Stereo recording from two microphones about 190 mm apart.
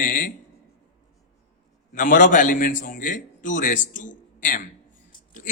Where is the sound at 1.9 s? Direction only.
45° left (ahead or behind).